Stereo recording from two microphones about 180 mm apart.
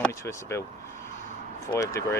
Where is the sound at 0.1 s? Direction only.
15° left (ahead or behind).